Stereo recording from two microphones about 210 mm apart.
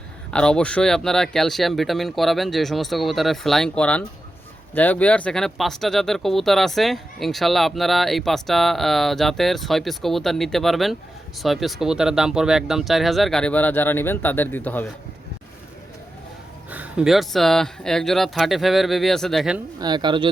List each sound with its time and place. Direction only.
0.3 s speech: 5° left (ahead or behind)
16.6 s speech: 5° right (ahead or behind)
19.8 s speech: 20° right (ahead or behind)